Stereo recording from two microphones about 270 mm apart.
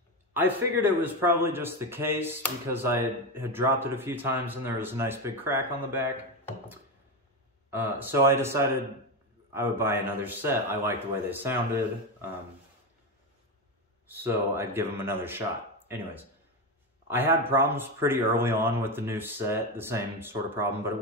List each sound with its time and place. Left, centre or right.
0.3 s speech: centre
7.7 s speech: centre
14.0 s speech: centre
17.1 s speech: centre